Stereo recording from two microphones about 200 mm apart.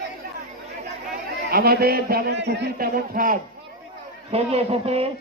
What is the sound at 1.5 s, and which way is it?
A man's voice, 50° right (ahead or behind).